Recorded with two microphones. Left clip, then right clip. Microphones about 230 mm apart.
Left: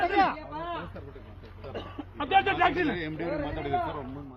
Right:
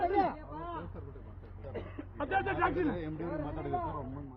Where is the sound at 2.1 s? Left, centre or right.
Left.